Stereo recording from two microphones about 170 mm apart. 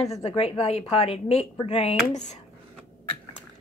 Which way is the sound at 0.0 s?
40° left (ahead or behind).